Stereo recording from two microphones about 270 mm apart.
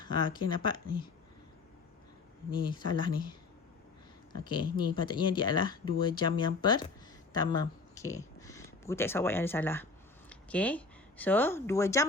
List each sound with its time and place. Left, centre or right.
0.0 s speech: centre
2.5 s a woman's voice: centre